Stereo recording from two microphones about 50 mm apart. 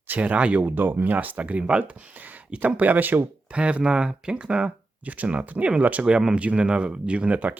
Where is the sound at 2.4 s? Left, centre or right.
Right.